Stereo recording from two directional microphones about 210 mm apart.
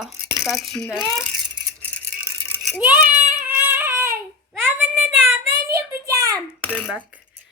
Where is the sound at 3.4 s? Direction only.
10° right (ahead or behind).